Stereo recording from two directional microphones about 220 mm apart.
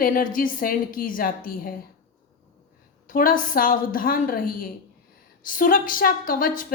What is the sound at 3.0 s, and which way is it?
A woman's voice, 40° left (ahead or behind).